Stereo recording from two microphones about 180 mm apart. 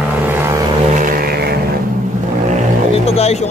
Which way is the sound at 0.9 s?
50° right (ahead or behind).